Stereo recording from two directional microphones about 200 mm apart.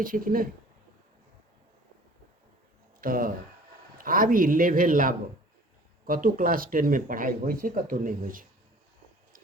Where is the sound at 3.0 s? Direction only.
45° right (ahead or behind).